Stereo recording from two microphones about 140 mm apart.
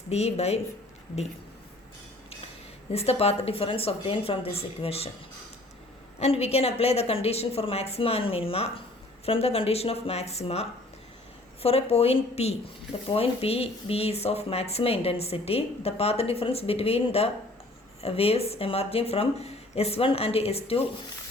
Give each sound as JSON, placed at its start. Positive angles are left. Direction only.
{"t": 0.1, "sound": "speech", "side_deg": 50}
{"t": 2.9, "sound": "speech", "side_deg": 45}
{"t": 6.1, "sound": "speech", "side_deg": 50}